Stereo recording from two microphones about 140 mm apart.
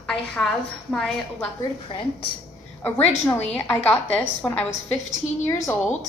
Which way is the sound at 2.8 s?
15° left (ahead or behind).